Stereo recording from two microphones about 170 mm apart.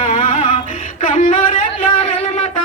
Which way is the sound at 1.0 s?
45° left (ahead or behind).